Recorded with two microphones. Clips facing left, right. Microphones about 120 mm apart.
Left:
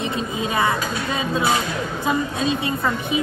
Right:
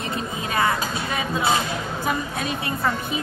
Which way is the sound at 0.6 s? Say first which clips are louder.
Even; 25° left (ahead or behind).